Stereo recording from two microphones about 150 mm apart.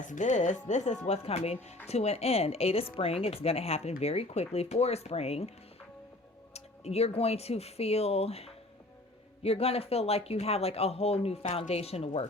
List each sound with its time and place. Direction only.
0.0 s speech: 55° left (ahead or behind)
6.5 s speech: 45° left (ahead or behind)